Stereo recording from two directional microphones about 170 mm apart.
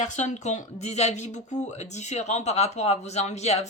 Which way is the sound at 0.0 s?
45° left (ahead or behind).